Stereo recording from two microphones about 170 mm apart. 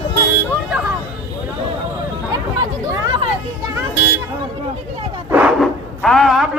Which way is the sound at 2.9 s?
25° right (ahead or behind).